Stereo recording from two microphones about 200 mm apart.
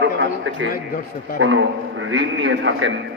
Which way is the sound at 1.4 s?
65° right (ahead or behind).